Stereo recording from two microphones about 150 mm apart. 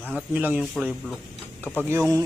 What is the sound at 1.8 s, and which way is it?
Speech, 15° right (ahead or behind).